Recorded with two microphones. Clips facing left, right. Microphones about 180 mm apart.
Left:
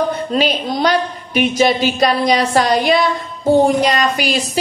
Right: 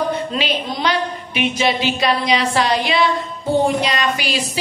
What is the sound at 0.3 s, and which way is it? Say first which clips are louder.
Speech: left 5 dB; 45° left (ahead or behind).